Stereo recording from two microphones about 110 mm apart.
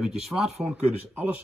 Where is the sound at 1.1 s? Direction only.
15° right (ahead or behind).